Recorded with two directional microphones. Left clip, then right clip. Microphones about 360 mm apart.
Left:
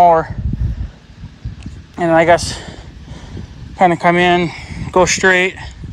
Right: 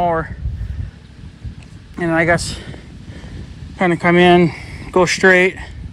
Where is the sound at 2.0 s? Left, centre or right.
Centre.